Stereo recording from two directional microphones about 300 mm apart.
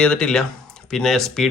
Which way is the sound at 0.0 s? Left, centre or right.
Centre.